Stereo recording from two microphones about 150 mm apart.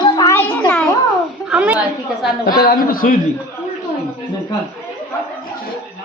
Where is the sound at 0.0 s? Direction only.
25° left (ahead or behind).